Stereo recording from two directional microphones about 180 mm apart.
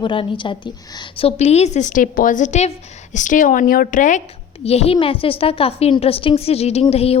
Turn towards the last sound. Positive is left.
turn(degrees=35)  # may be behind; listen again after turning